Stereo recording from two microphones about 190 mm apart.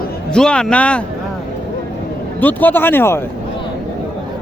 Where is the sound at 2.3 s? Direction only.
10° left (ahead or behind).